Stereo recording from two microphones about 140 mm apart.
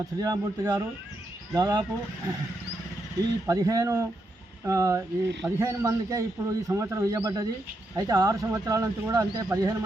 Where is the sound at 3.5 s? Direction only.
25° right (ahead or behind).